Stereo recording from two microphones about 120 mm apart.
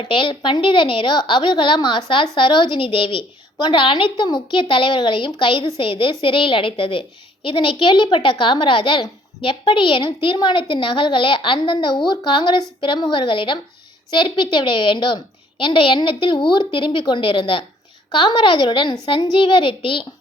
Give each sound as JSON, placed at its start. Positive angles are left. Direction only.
{"t": 0.1, "sound": "a child's voice", "side_deg": 45}